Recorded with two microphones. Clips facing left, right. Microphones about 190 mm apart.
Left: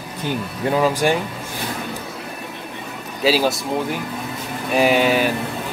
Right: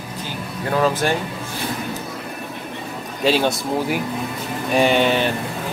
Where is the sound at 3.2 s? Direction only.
5° left (ahead or behind).